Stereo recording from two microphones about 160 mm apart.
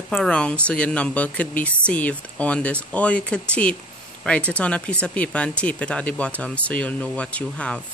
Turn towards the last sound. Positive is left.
turn(degrees=10)  # may be behind; listen again after turning